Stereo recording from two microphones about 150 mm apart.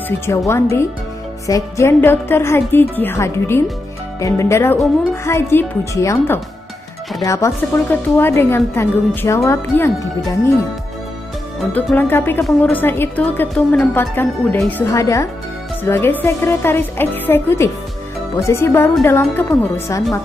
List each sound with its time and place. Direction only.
0.5 s speech: 15° left (ahead or behind)
11.7 s speech: 15° left (ahead or behind)